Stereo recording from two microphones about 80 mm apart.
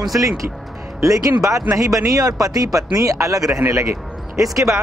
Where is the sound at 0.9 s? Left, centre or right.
Right.